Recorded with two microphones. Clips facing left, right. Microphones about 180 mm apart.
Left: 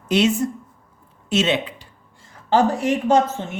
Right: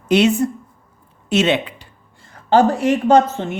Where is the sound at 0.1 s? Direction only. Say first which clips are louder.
Right 4 dB; 60° right (ahead or behind).